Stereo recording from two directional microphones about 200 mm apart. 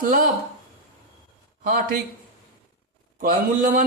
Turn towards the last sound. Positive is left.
turn(degrees=-40)  # may be behind; listen again after turning